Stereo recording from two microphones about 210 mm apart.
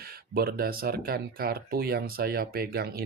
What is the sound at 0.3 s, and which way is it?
Speech, 45° right (ahead or behind).